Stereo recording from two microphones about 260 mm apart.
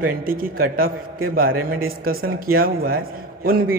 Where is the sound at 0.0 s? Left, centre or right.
Right.